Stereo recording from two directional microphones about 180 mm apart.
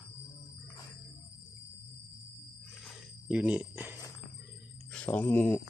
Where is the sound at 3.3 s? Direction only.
5° right (ahead or behind).